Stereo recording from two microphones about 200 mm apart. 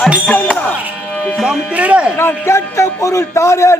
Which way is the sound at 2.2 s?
10° left (ahead or behind).